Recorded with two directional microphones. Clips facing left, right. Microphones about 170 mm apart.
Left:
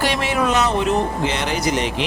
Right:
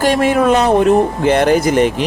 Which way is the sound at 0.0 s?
45° right (ahead or behind).